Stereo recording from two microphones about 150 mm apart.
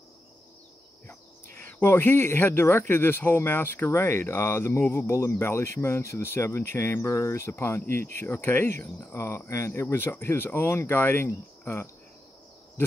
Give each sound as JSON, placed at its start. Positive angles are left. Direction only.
{"t": 1.7, "sound": "speech", "side_deg": 15}